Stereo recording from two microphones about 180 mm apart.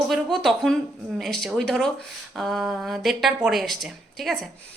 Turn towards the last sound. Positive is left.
turn(degrees=0)  # may be behind; listen again after turning